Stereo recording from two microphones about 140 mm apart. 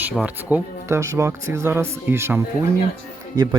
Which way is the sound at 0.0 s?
10° right (ahead or behind).